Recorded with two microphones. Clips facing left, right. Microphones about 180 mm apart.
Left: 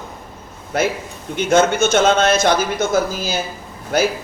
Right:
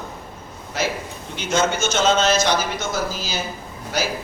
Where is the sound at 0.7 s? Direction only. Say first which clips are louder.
Left 5 dB; 55° left (ahead or behind).